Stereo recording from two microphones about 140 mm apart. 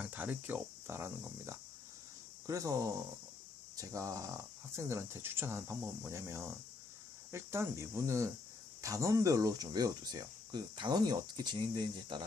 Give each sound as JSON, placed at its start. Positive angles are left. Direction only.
{"t": 0.0, "sound": "speech", "side_deg": -10}